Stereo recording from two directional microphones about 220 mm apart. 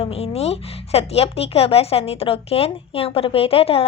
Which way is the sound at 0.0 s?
25° left (ahead or behind).